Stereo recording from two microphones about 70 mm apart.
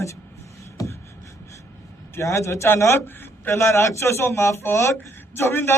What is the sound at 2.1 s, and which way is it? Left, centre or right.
A man's voice, left.